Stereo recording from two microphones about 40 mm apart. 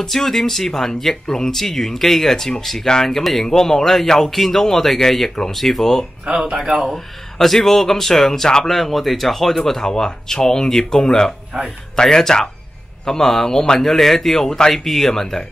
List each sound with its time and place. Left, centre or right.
0.0 s speech: centre
6.5 s speech: centre
6.9 s speech: centre
8.7 s speech: centre
9.6 s speech: centre